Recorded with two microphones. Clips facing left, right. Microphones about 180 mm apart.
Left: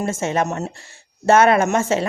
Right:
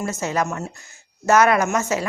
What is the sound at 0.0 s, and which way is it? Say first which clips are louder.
Speech: left 3 dB; 25° left (ahead or behind).